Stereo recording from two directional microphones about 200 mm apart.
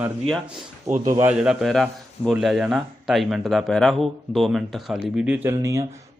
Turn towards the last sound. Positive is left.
turn(degrees=-15)  # may be behind; listen again after turning